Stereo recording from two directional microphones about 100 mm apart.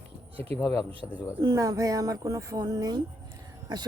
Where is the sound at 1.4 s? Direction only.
40° right (ahead or behind).